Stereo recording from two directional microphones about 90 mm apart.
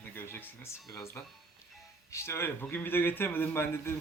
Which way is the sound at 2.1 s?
30° left (ahead or behind).